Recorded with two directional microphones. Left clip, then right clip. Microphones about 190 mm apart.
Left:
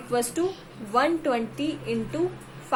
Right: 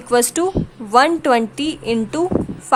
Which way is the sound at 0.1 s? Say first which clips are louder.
Right 10 dB; 45° right (ahead or behind).